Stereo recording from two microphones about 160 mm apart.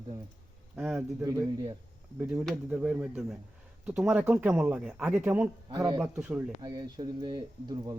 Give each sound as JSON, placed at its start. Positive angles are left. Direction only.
{"t": 0.9, "sound": "speech", "side_deg": -20}
{"t": 2.1, "sound": "speech", "side_deg": -5}
{"t": 5.7, "sound": "speech", "side_deg": -25}
{"t": 6.0, "sound": "speech", "side_deg": -5}
{"t": 6.6, "sound": "speech", "side_deg": -25}